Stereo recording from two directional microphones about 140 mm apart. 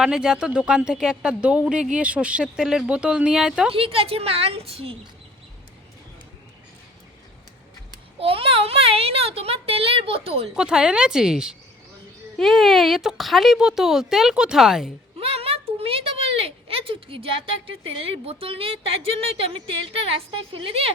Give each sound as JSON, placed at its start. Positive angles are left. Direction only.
{"t": 0.0, "sound": "speech", "side_deg": -5}
{"t": 3.7, "sound": "a child's voice", "side_deg": -40}
{"t": 8.2, "sound": "a child's voice", "side_deg": -40}
{"t": 10.5, "sound": "speech", "side_deg": -5}
{"t": 15.2, "sound": "speech", "side_deg": -45}